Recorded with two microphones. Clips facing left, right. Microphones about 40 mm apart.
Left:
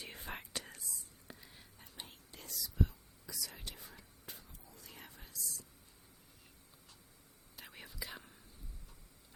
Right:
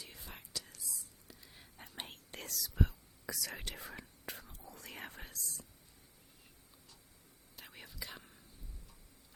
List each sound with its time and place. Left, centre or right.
0.0 s whispering: left
1.3 s a sound: left
1.8 s whispering: right
7.5 s whispering: centre